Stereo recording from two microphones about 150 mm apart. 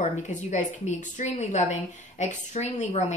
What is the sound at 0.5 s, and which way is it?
A woman's voice, 50° left (ahead or behind).